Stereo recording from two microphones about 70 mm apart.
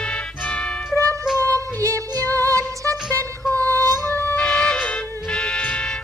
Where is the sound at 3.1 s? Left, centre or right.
Left.